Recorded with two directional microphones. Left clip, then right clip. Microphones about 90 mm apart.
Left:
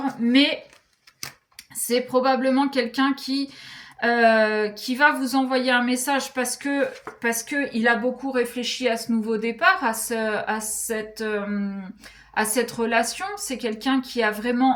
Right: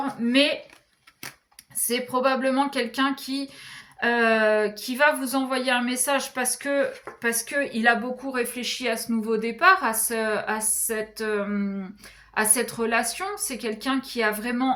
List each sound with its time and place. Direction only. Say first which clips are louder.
0.0 s speech: left 1 dB; 40° right (ahead or behind)
1.9 s speech: left 3 dB; 35° right (ahead or behind)